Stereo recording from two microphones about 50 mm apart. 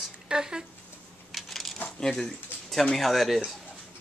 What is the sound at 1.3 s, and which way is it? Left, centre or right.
Coin, centre.